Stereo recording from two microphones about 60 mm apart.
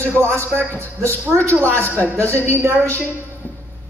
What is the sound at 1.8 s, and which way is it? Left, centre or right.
Speech, left.